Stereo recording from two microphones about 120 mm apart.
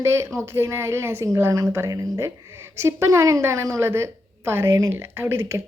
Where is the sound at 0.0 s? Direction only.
20° right (ahead or behind).